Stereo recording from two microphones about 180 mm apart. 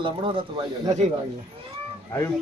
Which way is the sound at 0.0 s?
30° right (ahead or behind).